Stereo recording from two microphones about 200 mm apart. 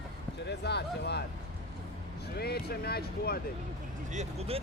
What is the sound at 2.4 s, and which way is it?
Speech, 55° left (ahead or behind).